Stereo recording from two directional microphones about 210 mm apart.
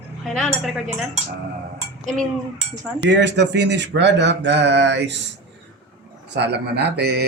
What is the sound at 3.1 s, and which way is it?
Speech, 55° right (ahead or behind).